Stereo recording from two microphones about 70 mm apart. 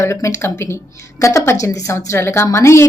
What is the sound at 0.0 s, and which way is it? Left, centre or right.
A woman's voice, left.